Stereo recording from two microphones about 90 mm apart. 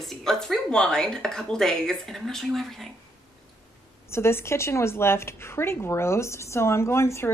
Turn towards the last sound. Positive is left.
turn(degrees=30)  # may be behind; listen again after turning